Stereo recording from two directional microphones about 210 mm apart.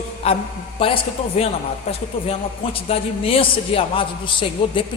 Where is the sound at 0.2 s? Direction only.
30° left (ahead or behind).